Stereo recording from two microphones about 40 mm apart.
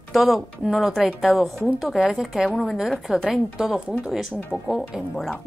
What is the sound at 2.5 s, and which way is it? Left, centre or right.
Speech, centre.